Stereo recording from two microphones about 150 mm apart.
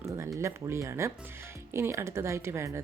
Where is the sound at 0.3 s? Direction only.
20° right (ahead or behind).